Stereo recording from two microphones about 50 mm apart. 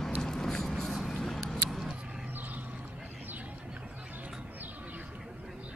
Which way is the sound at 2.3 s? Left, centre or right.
Right.